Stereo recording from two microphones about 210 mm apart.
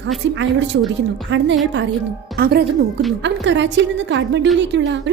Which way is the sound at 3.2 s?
60° right (ahead or behind).